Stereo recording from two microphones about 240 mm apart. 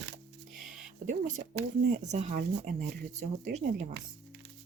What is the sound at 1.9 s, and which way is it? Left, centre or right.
Speech, right.